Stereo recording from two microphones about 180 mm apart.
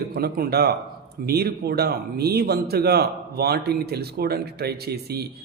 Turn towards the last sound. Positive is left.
turn(degrees=-60)  # may be behind; listen again after turning